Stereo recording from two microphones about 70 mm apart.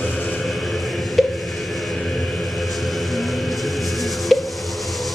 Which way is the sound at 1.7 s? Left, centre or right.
Centre.